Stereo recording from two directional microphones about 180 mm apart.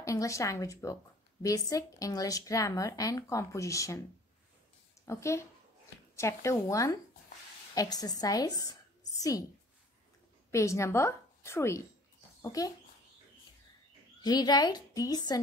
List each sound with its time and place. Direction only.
0.0 s a woman's voice: 20° left (ahead or behind)
5.0 s a woman's voice: 15° left (ahead or behind)
10.5 s a woman's voice: 15° left (ahead or behind)
14.2 s speech: 25° left (ahead or behind)